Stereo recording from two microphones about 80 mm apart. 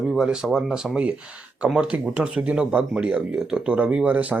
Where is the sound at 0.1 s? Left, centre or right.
Centre.